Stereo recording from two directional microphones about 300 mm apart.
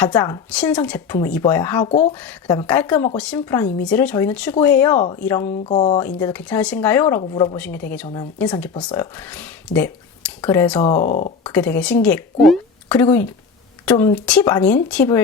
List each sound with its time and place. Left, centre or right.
0.0 s speech: centre
4.9 s speech: centre
5.2 s speech: centre
5.6 s speech: left
6.0 s speech: centre
7.5 s speech: centre
10.8 s speech: left
11.5 s speech: centre